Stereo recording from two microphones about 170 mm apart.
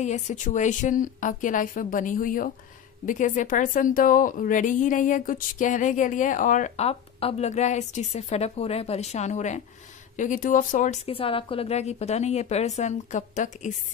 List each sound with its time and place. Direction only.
0.0 s a woman's voice: 45° left (ahead or behind)